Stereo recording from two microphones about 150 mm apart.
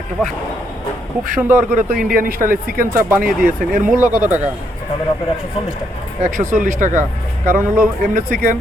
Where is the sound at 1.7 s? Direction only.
70° right (ahead or behind).